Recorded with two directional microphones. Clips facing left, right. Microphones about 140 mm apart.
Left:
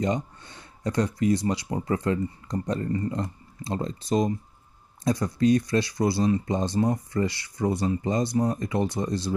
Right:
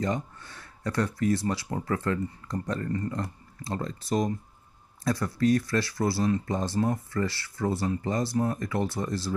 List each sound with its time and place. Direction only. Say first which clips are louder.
0.0 s speech: left 3 dB; 20° left (ahead or behind)